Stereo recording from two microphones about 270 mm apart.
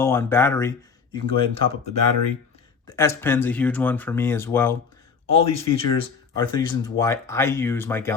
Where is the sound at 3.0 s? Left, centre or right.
Centre.